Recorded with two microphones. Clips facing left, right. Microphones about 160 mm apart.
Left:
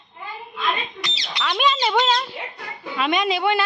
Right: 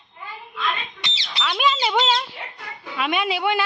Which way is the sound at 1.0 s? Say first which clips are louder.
Left 3 dB; 25° right (ahead or behind).